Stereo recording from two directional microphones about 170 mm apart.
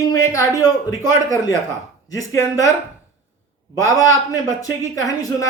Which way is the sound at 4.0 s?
20° left (ahead or behind).